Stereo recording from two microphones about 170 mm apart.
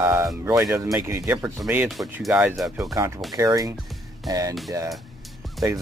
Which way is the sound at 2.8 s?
20° right (ahead or behind).